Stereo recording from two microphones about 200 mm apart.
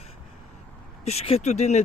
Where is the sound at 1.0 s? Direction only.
30° left (ahead or behind).